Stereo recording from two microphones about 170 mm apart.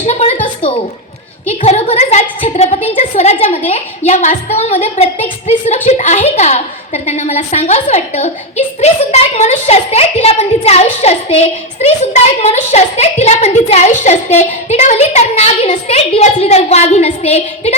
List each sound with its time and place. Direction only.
0.0 s a woman's voice: 40° left (ahead or behind)
1.5 s a woman's voice: 40° left (ahead or behind)